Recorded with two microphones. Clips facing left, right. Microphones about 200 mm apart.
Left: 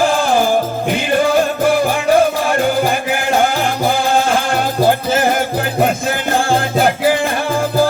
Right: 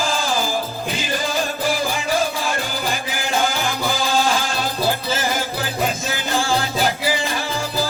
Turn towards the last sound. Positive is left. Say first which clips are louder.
# left 7 dB
turn(degrees=55)  # may be behind; listen again after turning